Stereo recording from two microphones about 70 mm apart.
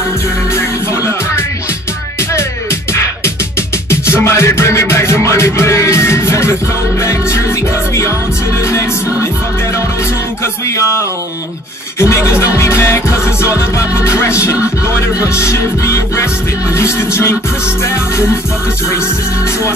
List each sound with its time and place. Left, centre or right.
0.6 s music: left
12.0 s music: left